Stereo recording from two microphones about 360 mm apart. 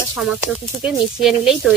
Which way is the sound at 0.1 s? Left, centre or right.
Centre.